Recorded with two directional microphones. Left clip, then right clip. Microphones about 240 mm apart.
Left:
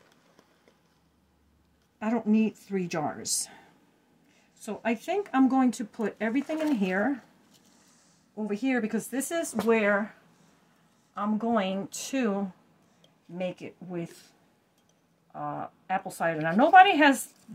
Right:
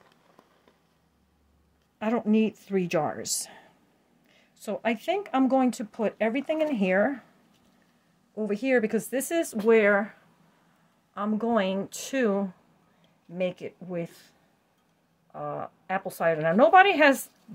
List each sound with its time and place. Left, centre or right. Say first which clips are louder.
2.0 s speech: right 2 dB; right
8.4 s speech: right 5 dB; right
11.1 s speech: right 2 dB; right
15.3 s speech: right 1 dB; right